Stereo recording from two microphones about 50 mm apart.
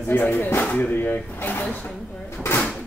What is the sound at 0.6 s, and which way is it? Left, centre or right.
Speech, left.